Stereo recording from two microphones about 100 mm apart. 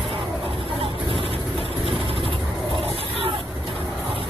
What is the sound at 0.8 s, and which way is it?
Vehicle, 65° right (ahead or behind).